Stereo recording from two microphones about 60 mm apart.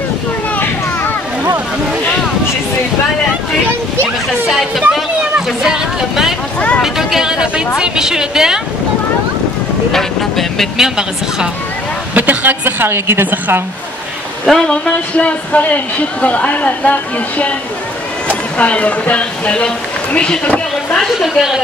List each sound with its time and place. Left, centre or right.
4.5 s a woman's voice: centre
9.9 s speech: centre
10.8 s a woman's voice: centre
12.1 s speech: right
14.4 s speech: centre
15.1 s a woman's voice: left
18.3 s speech: left
21.1 s speech: centre